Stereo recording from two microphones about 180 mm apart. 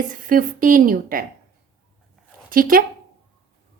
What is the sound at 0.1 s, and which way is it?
A woman's voice, 50° right (ahead or behind).